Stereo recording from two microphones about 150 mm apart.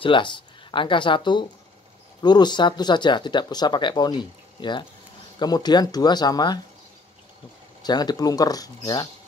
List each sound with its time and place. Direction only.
0.0 s speech: 35° left (ahead or behind)
7.8 s speech: 30° left (ahead or behind)